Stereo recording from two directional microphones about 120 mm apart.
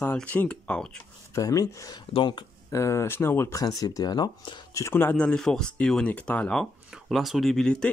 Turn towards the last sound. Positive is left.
turn(degrees=5)  # may be behind; listen again after turning